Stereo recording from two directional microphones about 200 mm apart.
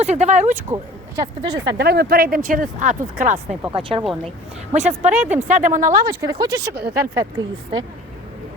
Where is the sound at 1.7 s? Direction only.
55° right (ahead or behind).